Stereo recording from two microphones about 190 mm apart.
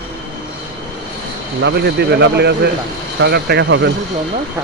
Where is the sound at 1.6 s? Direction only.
60° right (ahead or behind).